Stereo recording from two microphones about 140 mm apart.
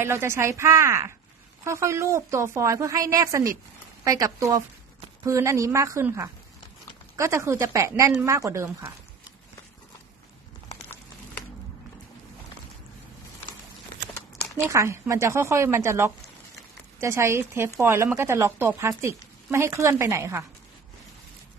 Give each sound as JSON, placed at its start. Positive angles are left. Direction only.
{"t": 0.0, "sound": "speech", "side_deg": -15}
{"t": 14.6, "sound": "speech", "side_deg": -20}